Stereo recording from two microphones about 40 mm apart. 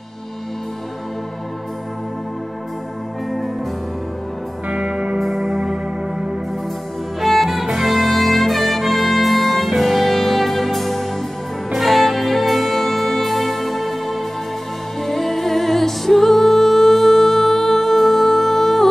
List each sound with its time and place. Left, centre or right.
4.6 s music: right
5.2 s music: centre
5.7 s music: centre
7.2 s music: centre